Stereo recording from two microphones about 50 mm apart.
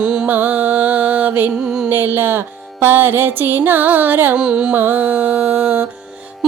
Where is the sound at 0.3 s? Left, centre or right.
Right.